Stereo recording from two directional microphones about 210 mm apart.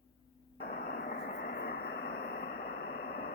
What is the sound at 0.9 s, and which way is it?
Vehicle, 45° left (ahead or behind).